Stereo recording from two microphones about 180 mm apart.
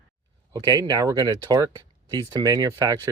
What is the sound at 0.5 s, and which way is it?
Speech, 20° right (ahead or behind).